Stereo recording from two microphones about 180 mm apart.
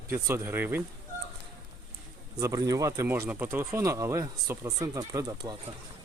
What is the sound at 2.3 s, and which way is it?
Speech, 20° right (ahead or behind).